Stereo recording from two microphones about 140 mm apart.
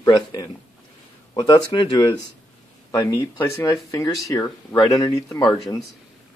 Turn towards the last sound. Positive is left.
turn(degrees=0)  # may be behind; listen again after turning